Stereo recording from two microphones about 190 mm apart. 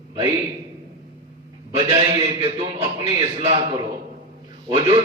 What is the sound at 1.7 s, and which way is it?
A man's voice, 20° right (ahead or behind).